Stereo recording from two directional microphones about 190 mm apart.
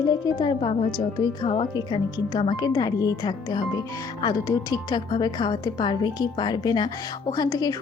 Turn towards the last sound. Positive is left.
turn(degrees=20)  # may be behind; listen again after turning